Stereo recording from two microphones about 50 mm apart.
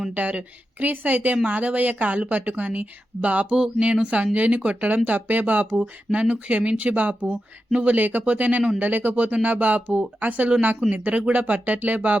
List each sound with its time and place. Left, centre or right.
0.1 s speech: right
5.7 s speech: right
7.9 s speech: right